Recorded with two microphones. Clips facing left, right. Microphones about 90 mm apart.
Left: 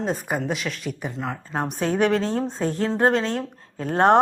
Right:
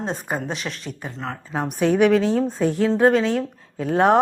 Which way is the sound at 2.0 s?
10° right (ahead or behind).